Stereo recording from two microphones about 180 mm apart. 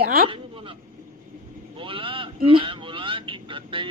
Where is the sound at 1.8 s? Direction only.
30° right (ahead or behind).